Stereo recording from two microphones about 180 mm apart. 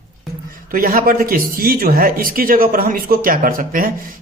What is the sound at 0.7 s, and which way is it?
A man's voice, 55° right (ahead or behind).